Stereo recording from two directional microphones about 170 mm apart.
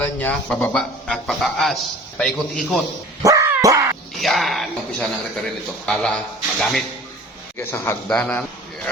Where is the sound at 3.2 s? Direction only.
20° right (ahead or behind).